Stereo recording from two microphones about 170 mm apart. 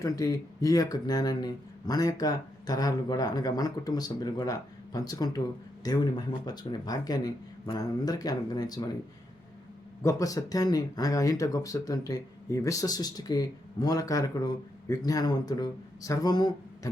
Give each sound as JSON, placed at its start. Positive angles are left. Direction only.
{"t": 0.0, "sound": "speech", "side_deg": 20}
{"t": 10.0, "sound": "speech", "side_deg": 20}